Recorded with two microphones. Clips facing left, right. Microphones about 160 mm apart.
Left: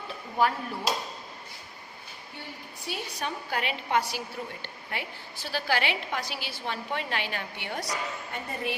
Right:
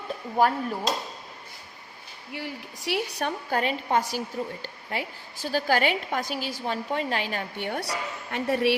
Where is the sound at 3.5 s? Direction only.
40° right (ahead or behind).